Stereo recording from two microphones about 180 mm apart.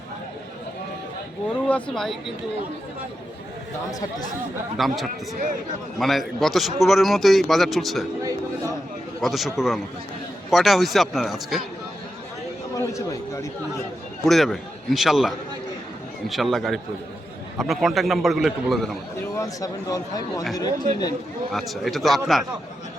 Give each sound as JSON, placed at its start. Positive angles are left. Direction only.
{"t": 1.6, "sound": "a man's voice", "side_deg": 5}
{"t": 4.8, "sound": "a man's voice", "side_deg": 0}
{"t": 9.2, "sound": "a man's voice", "side_deg": 0}
{"t": 12.7, "sound": "speech", "side_deg": 15}
{"t": 14.3, "sound": "a man's voice", "side_deg": 0}
{"t": 19.4, "sound": "speech", "side_deg": 20}
{"t": 21.5, "sound": "a man's voice", "side_deg": 0}